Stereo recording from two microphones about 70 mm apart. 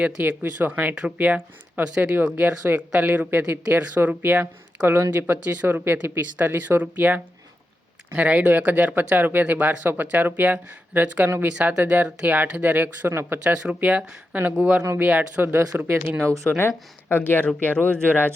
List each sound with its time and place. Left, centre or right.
0.0 s speech: centre
3.2 s speech: right
3.7 s speech: right
13.1 s speech: right
13.4 s speech: centre; by 15.9 s right
16.2 s speech: right
16.6 s speech: left
17.7 s speech: right